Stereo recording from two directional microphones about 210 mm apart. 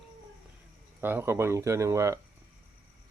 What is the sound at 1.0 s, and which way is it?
Speech, 10° right (ahead or behind).